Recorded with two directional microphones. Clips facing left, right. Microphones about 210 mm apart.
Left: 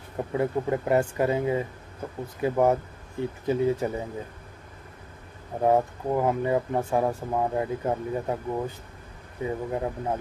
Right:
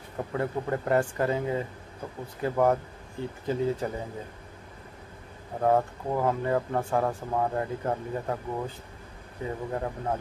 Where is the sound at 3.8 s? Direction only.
15° left (ahead or behind).